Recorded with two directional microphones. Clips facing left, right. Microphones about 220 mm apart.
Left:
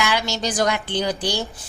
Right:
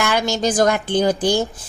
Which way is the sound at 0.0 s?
50° right (ahead or behind).